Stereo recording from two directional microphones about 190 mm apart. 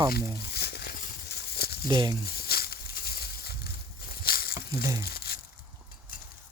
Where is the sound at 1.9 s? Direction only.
20° right (ahead or behind).